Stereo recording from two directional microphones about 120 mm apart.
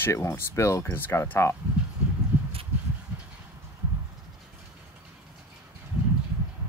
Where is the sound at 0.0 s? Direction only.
25° left (ahead or behind).